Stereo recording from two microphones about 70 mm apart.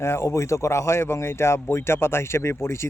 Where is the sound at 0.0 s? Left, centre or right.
Left.